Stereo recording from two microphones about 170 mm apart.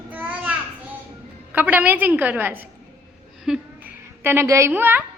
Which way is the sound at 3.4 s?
5° right (ahead or behind).